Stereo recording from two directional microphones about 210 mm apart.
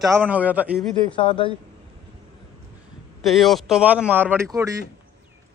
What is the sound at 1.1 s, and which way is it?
Speech, 25° left (ahead or behind).